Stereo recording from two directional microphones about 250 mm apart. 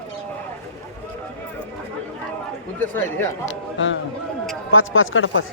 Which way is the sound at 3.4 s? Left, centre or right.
Left.